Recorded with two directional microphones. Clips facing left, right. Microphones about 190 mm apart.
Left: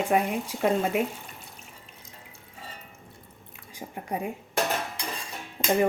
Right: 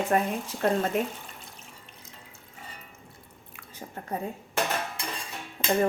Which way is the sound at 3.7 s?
10° left (ahead or behind).